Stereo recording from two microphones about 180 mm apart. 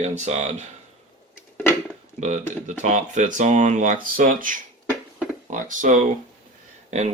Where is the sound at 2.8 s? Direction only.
40° right (ahead or behind).